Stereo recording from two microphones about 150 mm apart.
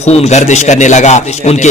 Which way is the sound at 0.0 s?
50° left (ahead or behind).